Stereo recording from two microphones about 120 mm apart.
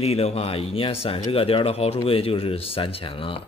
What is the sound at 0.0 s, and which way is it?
Speech, 55° left (ahead or behind).